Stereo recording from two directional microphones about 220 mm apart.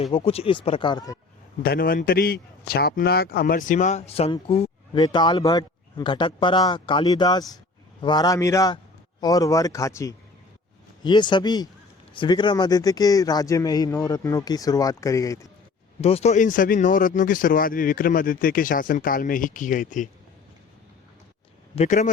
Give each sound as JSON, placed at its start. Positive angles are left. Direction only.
{"t": 0.0, "sound": "a man's voice", "side_deg": 25}
{"t": 1.6, "sound": "a man's voice", "side_deg": 40}
{"t": 16.0, "sound": "speech", "side_deg": 25}
{"t": 21.8, "sound": "speech", "side_deg": 35}